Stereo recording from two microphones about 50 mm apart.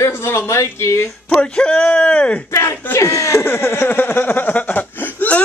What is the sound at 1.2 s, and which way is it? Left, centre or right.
Speech, centre.